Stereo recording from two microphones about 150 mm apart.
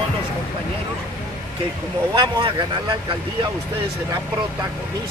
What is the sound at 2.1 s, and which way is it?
Speech, 30° right (ahead or behind).